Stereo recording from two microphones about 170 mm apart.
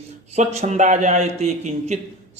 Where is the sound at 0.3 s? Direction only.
40° right (ahead or behind).